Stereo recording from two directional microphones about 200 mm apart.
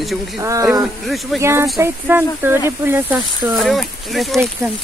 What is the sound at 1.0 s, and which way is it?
Speech, centre (ahead or behind).